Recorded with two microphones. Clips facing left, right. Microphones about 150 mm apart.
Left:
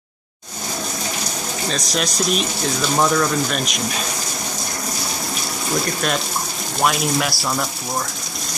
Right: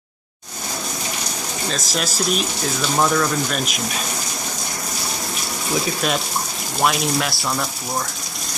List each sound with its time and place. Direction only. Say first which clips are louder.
1.7 s speech: left 2 dB; centre (ahead or behind)
5.8 s speech: even; 5° right (ahead or behind)